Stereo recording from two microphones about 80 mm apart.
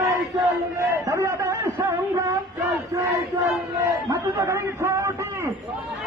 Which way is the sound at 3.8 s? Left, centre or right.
Right.